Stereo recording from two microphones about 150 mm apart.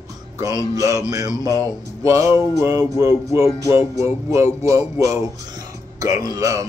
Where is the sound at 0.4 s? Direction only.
25° right (ahead or behind).